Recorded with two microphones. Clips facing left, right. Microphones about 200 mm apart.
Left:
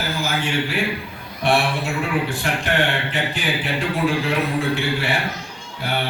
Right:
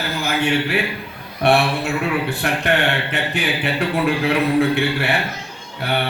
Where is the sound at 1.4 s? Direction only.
60° right (ahead or behind).